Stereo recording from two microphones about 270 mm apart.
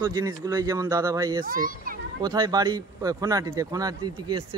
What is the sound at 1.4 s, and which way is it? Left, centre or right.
Speech, right.